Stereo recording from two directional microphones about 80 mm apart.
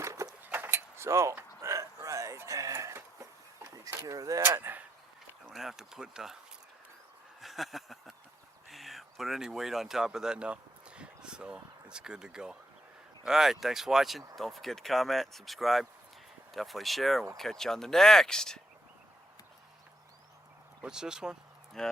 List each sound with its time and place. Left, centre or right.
0.0 s a sound: right
4.4 s speech: right
5.5 s speech: centre
7.4 s a sound: centre
8.6 s speech: centre
20.8 s speech: centre
21.8 s speech: centre